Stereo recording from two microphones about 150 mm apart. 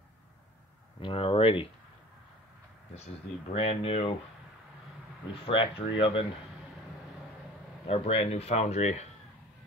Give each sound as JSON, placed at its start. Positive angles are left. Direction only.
{"t": 1.0, "sound": "speech", "side_deg": 40}
{"t": 3.5, "sound": "speech", "side_deg": 40}
{"t": 5.3, "sound": "speech", "side_deg": 35}
{"t": 7.8, "sound": "speech", "side_deg": 45}